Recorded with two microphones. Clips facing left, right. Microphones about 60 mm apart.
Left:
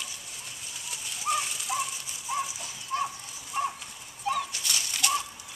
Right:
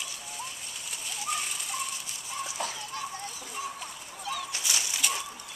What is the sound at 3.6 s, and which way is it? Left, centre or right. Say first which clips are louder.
Horse: left 7 dB; left.